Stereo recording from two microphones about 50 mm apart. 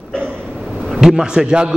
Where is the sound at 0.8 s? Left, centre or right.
Centre.